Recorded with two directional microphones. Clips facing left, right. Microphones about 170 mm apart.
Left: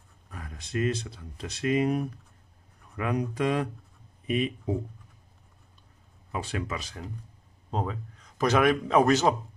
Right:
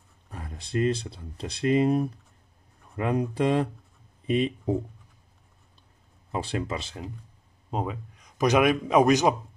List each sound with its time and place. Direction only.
0.3 s speech: 30° right (ahead or behind)
6.3 s speech: 30° right (ahead or behind)
7.7 s a man's voice: 15° right (ahead or behind)